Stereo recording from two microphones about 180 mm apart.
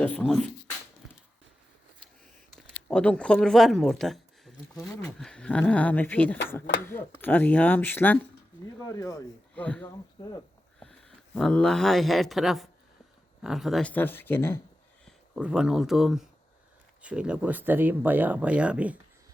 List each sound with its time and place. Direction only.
0.0 s speech: 10° left (ahead or behind)
2.6 s speech: 5° left (ahead or behind)
4.7 s speech: 20° left (ahead or behind)
5.2 s speech: 5° left (ahead or behind); by 10.4 s 25° left (ahead or behind)
10.8 s speech: 5° left (ahead or behind)
15.0 s speech: 5° right (ahead or behind)